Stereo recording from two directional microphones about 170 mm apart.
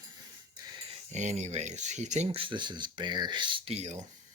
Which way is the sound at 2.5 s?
25° right (ahead or behind).